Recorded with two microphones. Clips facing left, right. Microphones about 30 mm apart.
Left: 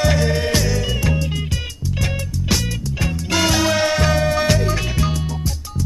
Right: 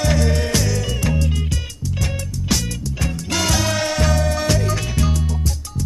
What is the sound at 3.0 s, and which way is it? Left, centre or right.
Music, centre.